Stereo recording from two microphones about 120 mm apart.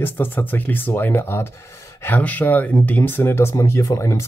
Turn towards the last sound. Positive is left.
turn(degrees=25)  # may be behind; listen again after turning